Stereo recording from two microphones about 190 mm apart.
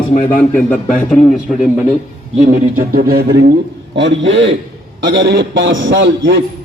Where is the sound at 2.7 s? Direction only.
50° right (ahead or behind).